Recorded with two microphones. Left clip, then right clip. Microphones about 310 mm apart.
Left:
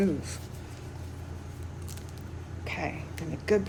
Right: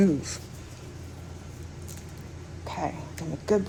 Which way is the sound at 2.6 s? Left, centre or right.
Centre.